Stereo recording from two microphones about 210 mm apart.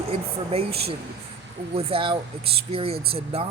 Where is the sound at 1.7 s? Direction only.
25° right (ahead or behind).